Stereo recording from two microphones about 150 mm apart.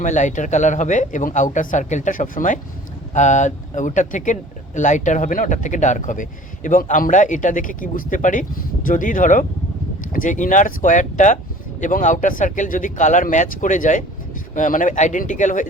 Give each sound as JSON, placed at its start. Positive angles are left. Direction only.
{"t": 0.0, "sound": "speech", "side_deg": 55}